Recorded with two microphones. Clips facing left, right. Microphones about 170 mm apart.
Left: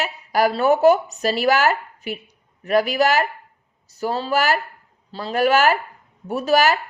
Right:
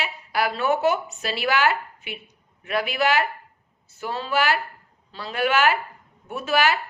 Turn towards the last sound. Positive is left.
turn(degrees=40)  # may be behind; listen again after turning